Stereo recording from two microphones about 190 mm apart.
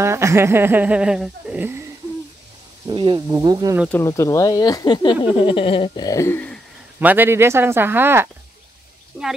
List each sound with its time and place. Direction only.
0.0 s speech: 15° right (ahead or behind)
2.9 s speech: 25° right (ahead or behind)
3.9 s speech: 15° left (ahead or behind)
7.0 s speech: 10° right (ahead or behind)